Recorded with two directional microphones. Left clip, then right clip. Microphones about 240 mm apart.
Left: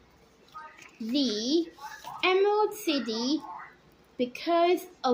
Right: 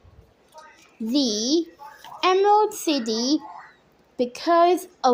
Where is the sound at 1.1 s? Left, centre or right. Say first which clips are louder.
Right 5 dB; right.